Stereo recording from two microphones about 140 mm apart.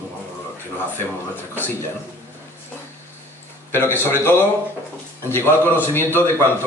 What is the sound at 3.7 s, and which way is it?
A man's voice, 15° left (ahead or behind).